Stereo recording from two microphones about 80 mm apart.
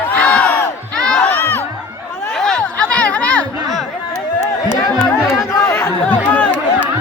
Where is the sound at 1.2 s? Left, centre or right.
Left.